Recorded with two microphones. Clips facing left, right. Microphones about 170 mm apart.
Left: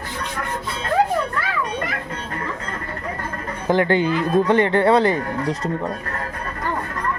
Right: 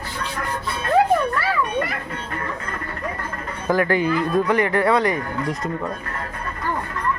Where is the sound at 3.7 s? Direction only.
25° left (ahead or behind).